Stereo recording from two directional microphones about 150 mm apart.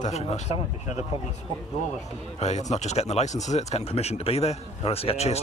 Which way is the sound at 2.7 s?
50° left (ahead or behind).